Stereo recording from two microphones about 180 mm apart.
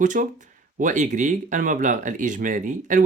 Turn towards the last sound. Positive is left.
turn(degrees=-45)  # may be behind; listen again after turning